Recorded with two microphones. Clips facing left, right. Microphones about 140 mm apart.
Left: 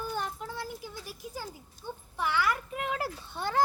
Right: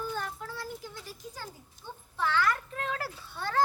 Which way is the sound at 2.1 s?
15° left (ahead or behind).